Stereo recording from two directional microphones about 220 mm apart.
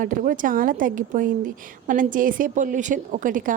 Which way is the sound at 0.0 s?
40° right (ahead or behind).